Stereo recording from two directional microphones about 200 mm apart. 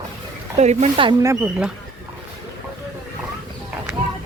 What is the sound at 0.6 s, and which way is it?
Speech, 35° right (ahead or behind).